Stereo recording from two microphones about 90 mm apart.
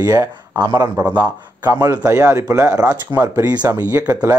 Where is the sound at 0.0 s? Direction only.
40° right (ahead or behind).